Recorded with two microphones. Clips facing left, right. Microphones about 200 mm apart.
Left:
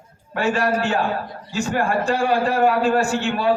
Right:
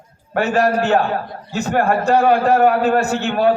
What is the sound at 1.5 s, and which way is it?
A man's voice, 50° right (ahead or behind).